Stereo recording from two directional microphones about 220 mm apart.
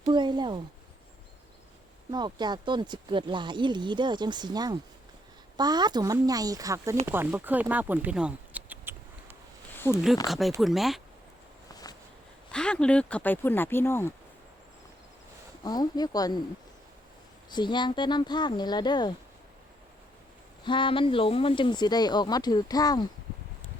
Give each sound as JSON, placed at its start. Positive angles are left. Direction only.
{"t": 0.1, "sound": "speech", "side_deg": -20}
{"t": 2.0, "sound": "a woman's voice", "side_deg": -20}
{"t": 11.7, "sound": "a sound", "side_deg": 15}
{"t": 12.5, "sound": "speech", "side_deg": 5}
{"t": 15.6, "sound": "speech", "side_deg": 20}
{"t": 17.5, "sound": "speech", "side_deg": 20}
{"t": 20.7, "sound": "speech", "side_deg": 20}